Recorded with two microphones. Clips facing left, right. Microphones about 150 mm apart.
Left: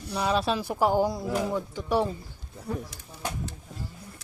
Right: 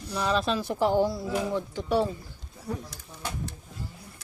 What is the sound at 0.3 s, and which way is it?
Speech, 10° left (ahead or behind).